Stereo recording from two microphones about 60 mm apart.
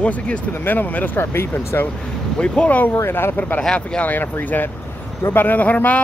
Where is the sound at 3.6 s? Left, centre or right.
Centre.